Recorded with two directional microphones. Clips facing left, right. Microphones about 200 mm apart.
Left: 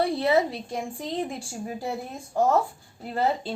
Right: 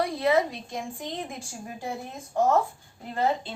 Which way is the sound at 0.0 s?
30° left (ahead or behind).